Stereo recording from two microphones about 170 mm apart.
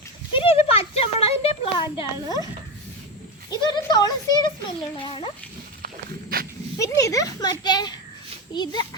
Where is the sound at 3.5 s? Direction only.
25° left (ahead or behind).